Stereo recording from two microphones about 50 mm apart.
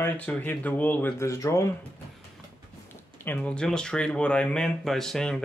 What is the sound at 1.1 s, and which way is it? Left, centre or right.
Speech, left.